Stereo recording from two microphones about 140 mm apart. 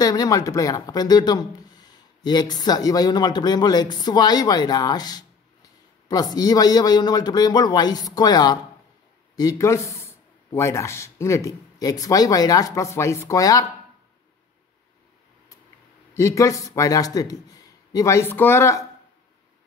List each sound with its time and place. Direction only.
0.0 s speech: 25° left (ahead or behind)
16.1 s speech: 20° left (ahead or behind)